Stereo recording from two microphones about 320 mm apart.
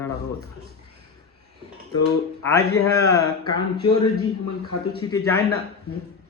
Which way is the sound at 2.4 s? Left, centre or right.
Centre.